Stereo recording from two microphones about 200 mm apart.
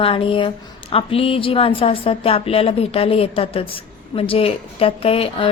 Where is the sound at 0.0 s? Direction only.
25° left (ahead or behind).